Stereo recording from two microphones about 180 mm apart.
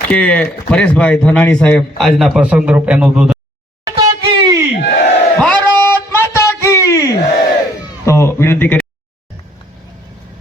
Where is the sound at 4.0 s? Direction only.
20° right (ahead or behind).